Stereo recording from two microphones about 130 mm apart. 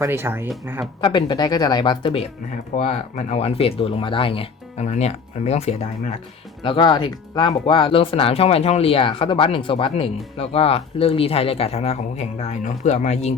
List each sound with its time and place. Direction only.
0.0 s speech: 20° right (ahead or behind)
1.0 s speech: 35° left (ahead or behind)
2.7 s speech: 60° left (ahead or behind); by 4.4 s 45° left (ahead or behind)
4.8 s speech: 60° left (ahead or behind)
6.6 s speech: 40° left (ahead or behind); by 13.3 s 60° left (ahead or behind)